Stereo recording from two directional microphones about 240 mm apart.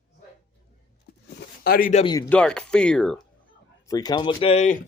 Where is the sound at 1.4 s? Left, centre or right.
Left.